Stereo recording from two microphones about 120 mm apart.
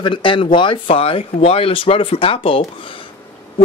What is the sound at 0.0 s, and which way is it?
Speech, 45° left (ahead or behind).